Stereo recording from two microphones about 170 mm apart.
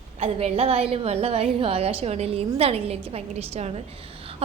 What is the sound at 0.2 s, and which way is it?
A woman's voice, 35° right (ahead or behind).